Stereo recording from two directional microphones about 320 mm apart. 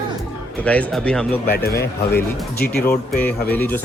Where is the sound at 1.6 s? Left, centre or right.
Left.